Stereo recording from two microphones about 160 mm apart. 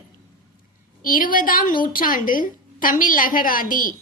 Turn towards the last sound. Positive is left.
turn(degrees=60)  # may be behind; listen again after turning